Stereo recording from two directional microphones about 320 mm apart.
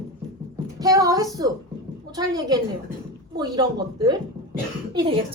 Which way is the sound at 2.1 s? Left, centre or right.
Centre.